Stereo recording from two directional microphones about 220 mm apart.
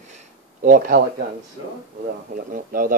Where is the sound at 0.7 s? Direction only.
40° right (ahead or behind).